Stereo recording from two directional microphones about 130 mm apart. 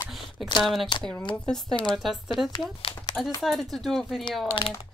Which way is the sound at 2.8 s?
45° left (ahead or behind).